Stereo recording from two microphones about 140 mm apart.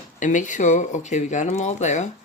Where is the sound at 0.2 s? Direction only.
65° left (ahead or behind).